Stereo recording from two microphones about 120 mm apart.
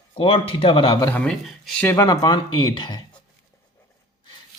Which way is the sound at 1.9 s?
30° left (ahead or behind).